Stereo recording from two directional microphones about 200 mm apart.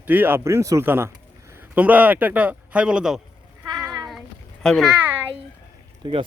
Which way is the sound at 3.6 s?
20° right (ahead or behind).